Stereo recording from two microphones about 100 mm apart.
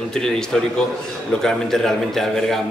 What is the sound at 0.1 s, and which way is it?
A man's voice, 5° left (ahead or behind).